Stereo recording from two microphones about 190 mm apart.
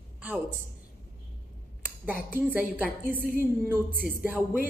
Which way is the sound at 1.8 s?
10° right (ahead or behind).